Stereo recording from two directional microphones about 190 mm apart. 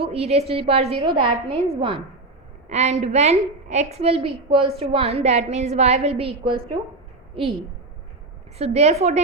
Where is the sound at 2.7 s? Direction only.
35° right (ahead or behind).